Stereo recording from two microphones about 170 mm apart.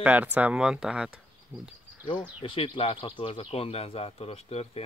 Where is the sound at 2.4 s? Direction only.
30° left (ahead or behind).